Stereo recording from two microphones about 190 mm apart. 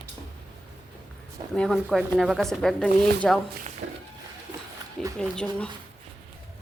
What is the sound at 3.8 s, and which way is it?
Music, 45° right (ahead or behind).